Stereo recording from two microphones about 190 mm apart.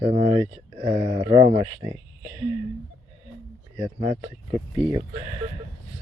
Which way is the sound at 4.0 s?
25° right (ahead or behind).